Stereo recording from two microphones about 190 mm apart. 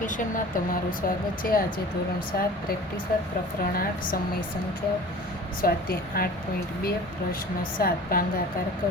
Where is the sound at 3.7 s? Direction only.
50° left (ahead or behind).